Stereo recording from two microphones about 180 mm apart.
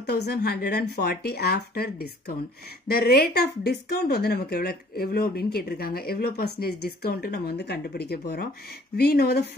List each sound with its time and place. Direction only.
0.0 s speech: 65° left (ahead or behind)